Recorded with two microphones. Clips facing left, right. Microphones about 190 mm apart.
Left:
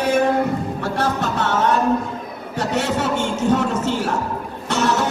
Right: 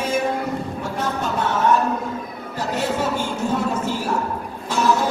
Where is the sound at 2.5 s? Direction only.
80° left.